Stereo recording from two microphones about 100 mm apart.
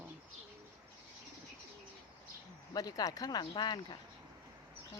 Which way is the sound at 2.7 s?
40° left (ahead or behind).